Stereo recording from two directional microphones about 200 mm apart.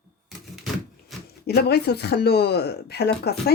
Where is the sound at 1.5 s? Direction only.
55° left (ahead or behind).